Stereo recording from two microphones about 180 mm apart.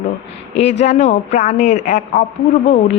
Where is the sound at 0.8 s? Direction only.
40° left (ahead or behind).